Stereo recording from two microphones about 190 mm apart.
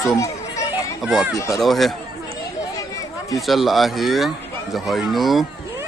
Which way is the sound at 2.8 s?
20° left (ahead or behind).